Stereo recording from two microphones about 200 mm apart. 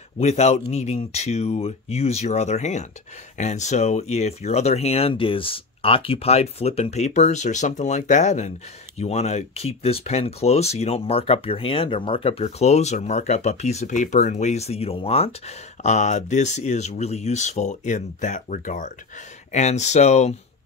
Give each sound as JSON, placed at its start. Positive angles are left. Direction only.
{"t": 0.2, "sound": "speech", "side_deg": 35}